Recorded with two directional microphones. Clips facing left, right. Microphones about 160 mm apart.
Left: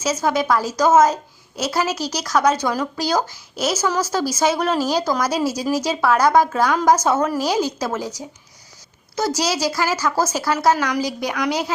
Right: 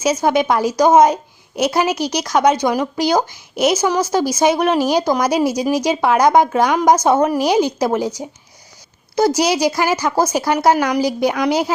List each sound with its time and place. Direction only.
0.2 s a woman's voice: 25° right (ahead or behind)
1.7 s a woman's voice: 15° right (ahead or behind)
9.1 s a woman's voice: 25° right (ahead or behind)